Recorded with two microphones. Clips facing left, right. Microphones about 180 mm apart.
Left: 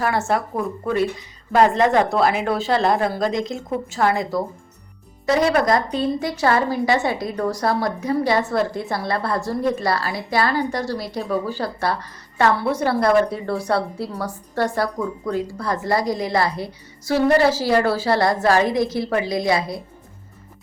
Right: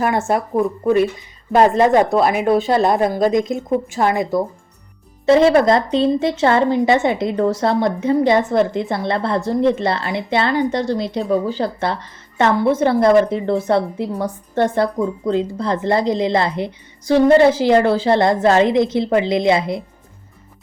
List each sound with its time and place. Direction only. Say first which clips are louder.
0.0 s a woman's voice: right 3 dB; 20° right (ahead or behind)
2.1 s a woman's voice: right 4 dB; 20° right (ahead or behind)